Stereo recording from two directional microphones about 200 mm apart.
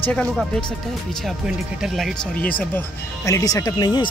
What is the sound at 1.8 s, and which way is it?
Speech, centre (ahead or behind).